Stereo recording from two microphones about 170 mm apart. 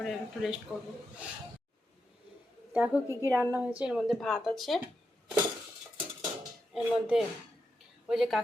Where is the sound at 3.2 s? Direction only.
15° right (ahead or behind); by 4.8 s centre (ahead or behind).